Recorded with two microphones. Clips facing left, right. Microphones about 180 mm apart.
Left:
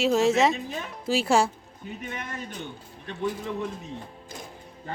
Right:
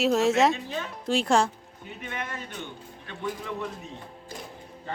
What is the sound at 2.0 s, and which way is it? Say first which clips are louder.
Speech: right 1 dB; 40° left (ahead or behind).